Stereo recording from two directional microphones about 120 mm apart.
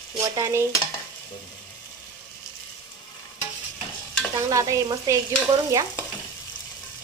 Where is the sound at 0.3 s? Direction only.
25° right (ahead or behind).